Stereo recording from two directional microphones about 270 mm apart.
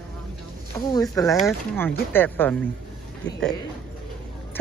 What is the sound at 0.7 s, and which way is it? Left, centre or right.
Speech, centre.